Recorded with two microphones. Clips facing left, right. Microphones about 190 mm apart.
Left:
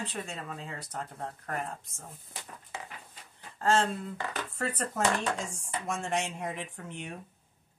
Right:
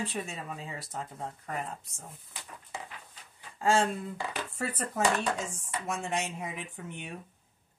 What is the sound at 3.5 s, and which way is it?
Speech, 10° right (ahead or behind).